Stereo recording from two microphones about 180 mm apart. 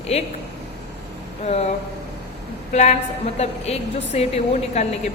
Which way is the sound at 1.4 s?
35° left (ahead or behind).